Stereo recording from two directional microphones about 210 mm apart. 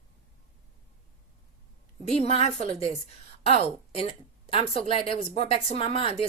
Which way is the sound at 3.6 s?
25° left (ahead or behind).